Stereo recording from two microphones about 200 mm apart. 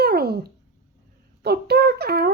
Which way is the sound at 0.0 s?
50° right (ahead or behind).